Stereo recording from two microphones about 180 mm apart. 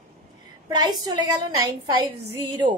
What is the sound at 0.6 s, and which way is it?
Speech, 20° right (ahead or behind).